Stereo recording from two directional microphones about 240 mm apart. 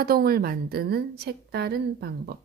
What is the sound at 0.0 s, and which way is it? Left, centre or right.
Speech, right.